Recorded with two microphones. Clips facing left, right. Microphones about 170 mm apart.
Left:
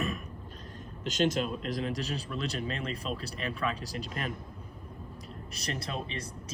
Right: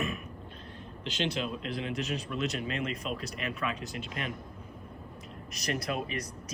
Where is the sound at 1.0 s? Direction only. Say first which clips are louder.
Left 4 dB; 45° left (ahead or behind).